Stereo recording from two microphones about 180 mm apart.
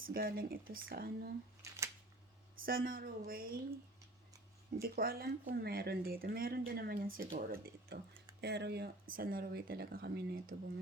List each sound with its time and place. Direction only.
0.1 s speech: 55° right (ahead or behind)
1.6 s a sound: 15° right (ahead or behind)
2.6 s speech: 55° right (ahead or behind)
4.8 s speech: 55° right (ahead or behind)
8.4 s speech: 70° right (ahead or behind)